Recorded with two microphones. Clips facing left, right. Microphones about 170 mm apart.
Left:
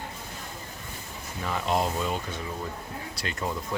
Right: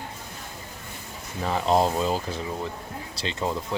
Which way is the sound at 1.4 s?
35° right (ahead or behind).